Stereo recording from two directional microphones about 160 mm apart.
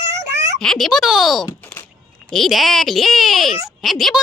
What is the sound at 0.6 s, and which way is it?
Speech, 5° left (ahead or behind).